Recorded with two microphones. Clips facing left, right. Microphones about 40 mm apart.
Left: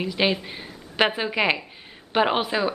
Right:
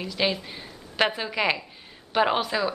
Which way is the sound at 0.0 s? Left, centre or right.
Left.